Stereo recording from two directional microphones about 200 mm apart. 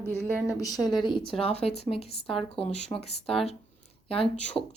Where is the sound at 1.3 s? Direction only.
30° left (ahead or behind).